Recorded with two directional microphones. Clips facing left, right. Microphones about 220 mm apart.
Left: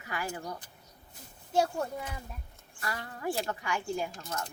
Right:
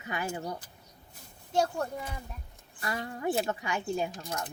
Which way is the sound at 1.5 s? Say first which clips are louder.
Even; 5° left (ahead or behind).